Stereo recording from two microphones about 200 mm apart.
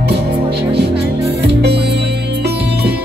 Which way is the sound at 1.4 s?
55° right (ahead or behind).